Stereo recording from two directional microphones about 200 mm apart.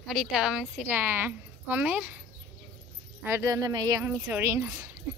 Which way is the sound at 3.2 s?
10° right (ahead or behind).